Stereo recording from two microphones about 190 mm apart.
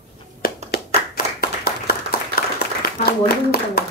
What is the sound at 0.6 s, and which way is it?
Clapping, 55° left (ahead or behind).